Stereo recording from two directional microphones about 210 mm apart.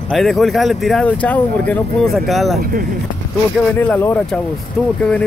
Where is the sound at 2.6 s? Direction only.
45° right (ahead or behind).